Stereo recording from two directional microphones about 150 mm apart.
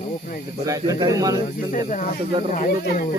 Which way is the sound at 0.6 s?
25° right (ahead or behind).